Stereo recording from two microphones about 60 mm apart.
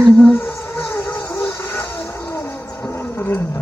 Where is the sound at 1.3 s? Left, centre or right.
Left.